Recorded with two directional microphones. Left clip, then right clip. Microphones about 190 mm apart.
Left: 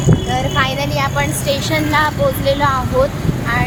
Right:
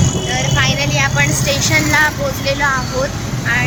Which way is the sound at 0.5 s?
20° left (ahead or behind).